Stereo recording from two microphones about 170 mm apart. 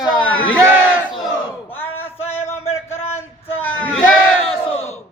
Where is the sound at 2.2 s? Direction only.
35° left (ahead or behind).